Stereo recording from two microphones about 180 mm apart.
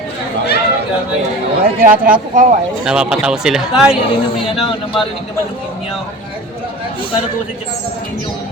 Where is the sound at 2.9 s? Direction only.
5° right (ahead or behind).